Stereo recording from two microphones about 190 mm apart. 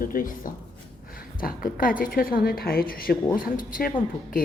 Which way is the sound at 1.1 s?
50° left (ahead or behind).